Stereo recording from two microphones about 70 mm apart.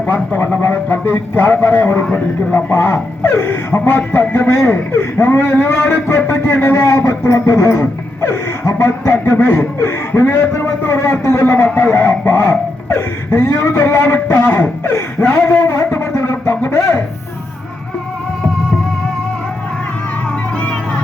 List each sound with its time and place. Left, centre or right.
0.1 s speech: left
2.7 s speech: left
15.9 s a sound: left